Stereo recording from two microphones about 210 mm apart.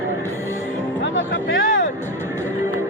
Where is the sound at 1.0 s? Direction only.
60° left (ahead or behind).